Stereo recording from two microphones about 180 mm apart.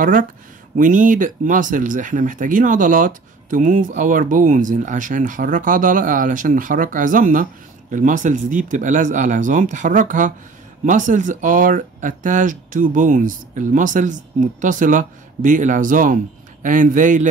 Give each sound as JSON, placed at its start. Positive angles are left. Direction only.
{"t": 0.0, "sound": "speech", "side_deg": -50}